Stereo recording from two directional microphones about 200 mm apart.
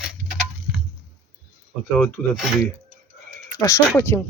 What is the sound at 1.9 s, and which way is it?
Speech, 5° left (ahead or behind).